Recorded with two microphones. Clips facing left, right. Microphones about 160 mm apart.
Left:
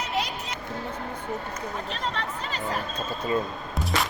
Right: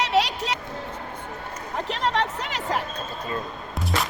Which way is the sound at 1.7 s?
90° right.